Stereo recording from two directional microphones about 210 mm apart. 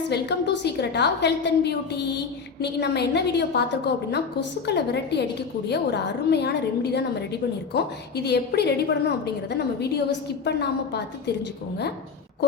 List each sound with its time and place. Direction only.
0.1 s a woman's voice: 55° left (ahead or behind)